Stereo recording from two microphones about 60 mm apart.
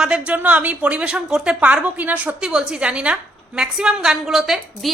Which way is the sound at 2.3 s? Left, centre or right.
Centre.